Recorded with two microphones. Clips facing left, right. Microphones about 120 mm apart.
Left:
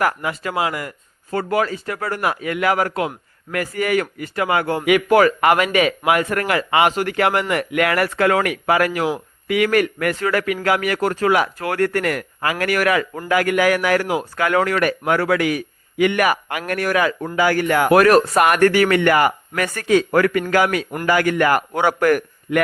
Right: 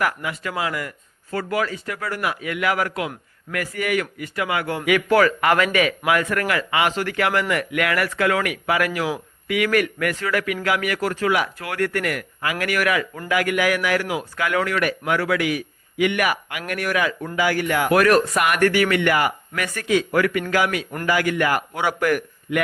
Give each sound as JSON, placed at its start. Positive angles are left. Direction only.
{"t": 0.0, "sound": "speech", "side_deg": 35}
{"t": 4.8, "sound": "a man's voice", "side_deg": 15}
{"t": 17.9, "sound": "a man's voice", "side_deg": 30}